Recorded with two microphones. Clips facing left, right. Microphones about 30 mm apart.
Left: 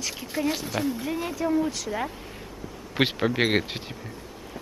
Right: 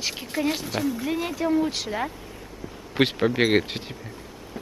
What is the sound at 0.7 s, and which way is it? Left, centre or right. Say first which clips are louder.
Speech: right 2 dB; centre.